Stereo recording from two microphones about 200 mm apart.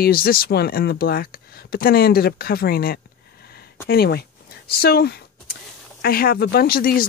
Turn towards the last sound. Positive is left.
turn(degrees=45)  # may be behind; listen again after turning